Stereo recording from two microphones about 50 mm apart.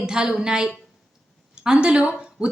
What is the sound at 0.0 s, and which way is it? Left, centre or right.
A woman's voice, centre.